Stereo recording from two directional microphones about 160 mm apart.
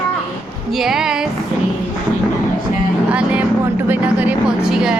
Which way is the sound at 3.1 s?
10° right (ahead or behind).